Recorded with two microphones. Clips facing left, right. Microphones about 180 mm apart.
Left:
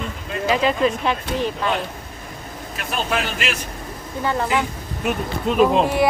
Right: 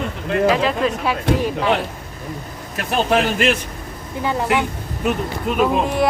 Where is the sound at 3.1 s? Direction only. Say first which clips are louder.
Right 8 dB; 50° right (ahead or behind).